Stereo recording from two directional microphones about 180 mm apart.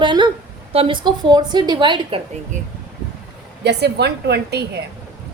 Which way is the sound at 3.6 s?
65° right (ahead or behind).